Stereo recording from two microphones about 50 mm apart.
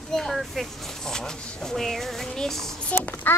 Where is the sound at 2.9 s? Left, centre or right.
Left.